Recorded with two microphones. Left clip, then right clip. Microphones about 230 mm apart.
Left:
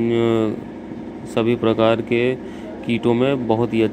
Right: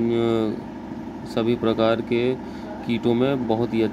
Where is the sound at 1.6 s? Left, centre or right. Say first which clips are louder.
Left 4 dB; centre.